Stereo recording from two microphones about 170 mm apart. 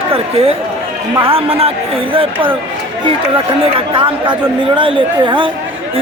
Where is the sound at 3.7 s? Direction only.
30° right (ahead or behind).